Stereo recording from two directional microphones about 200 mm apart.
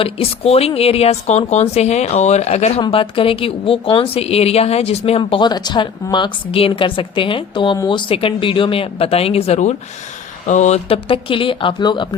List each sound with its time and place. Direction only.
0.0 s a woman's voice: 30° left (ahead or behind)